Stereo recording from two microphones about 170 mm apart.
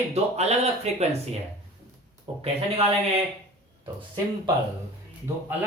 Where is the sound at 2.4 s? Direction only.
35° right (ahead or behind).